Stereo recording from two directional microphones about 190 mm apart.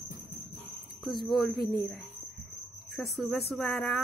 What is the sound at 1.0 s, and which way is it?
Speech, centre (ahead or behind).